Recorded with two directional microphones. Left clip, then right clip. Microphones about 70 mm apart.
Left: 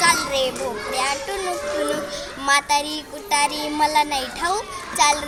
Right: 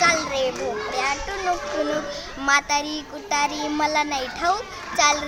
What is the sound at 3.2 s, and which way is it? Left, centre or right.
A child's voice, right.